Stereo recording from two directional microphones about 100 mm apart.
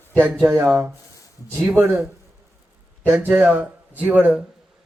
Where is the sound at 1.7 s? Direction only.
20° right (ahead or behind).